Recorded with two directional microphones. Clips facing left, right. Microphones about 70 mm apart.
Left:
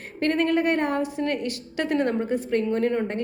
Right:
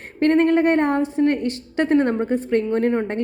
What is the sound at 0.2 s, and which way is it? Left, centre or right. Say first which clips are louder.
A woman's voice: right 6 dB; right.